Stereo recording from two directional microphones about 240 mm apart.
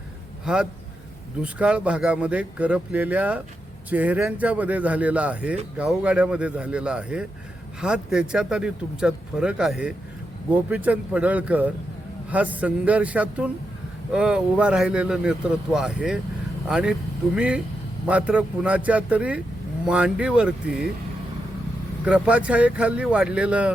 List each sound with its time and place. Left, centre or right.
0.4 s a man's voice: centre
22.0 s speech: centre